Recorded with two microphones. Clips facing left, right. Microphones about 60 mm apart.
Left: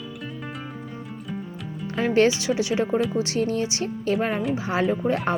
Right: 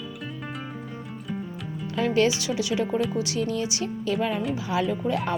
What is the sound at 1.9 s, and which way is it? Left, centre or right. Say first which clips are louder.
Speech: left 3 dB; left.